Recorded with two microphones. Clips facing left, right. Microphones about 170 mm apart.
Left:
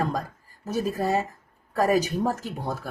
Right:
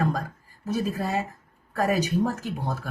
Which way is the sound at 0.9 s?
40° left (ahead or behind).